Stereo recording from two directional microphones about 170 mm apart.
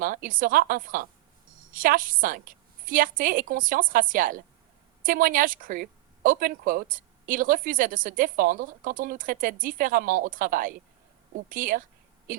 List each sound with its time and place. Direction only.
0.0 s a woman's voice: 55° right (ahead or behind)